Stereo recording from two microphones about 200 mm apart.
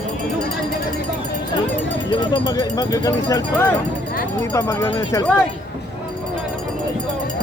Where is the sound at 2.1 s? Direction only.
25° left (ahead or behind).